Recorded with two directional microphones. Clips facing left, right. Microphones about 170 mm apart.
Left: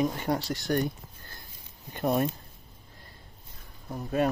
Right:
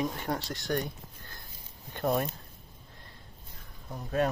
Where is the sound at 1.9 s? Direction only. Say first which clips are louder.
Left 2 dB; 10° left (ahead or behind).